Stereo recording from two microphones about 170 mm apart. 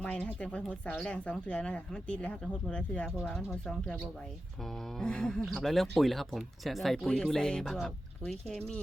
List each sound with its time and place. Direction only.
0.0 s speech: 5° left (ahead or behind)